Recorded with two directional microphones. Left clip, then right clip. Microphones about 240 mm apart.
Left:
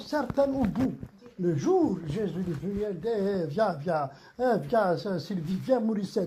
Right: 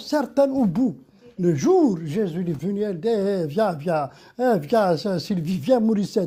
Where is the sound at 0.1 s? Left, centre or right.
Right.